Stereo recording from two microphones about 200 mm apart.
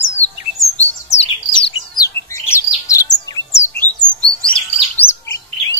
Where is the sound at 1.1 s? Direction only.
30° left (ahead or behind).